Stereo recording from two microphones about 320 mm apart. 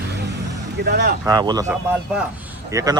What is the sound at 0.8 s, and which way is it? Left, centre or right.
Speech, right.